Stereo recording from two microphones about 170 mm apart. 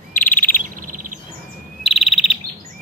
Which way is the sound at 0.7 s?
50° right (ahead or behind).